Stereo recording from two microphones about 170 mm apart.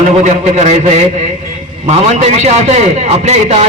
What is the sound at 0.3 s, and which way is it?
Speech, 45° right (ahead or behind).